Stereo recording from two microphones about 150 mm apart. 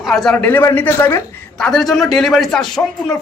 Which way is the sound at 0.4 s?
15° left (ahead or behind).